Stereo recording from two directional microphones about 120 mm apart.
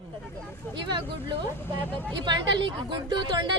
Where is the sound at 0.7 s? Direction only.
40° right (ahead or behind).